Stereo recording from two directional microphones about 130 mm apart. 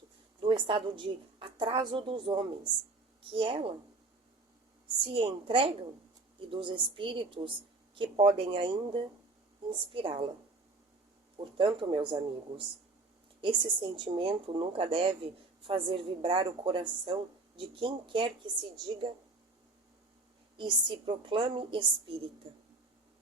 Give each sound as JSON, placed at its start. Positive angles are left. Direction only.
{"t": 0.4, "sound": "a woman's voice", "side_deg": -40}
{"t": 5.0, "sound": "a woman's voice", "side_deg": -45}
{"t": 11.3, "sound": "speech", "side_deg": -40}
{"t": 20.6, "sound": "speech", "side_deg": -40}